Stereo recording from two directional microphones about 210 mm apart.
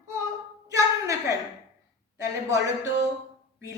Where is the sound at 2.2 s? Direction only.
15° right (ahead or behind).